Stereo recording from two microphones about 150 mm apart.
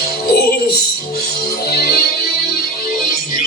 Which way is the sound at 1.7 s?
90° left.